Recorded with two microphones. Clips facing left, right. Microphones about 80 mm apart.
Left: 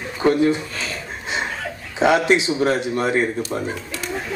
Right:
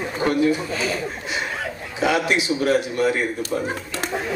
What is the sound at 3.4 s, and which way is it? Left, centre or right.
Speech, right.